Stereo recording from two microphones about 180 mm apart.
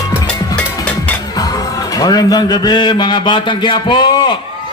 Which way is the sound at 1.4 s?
20° left (ahead or behind).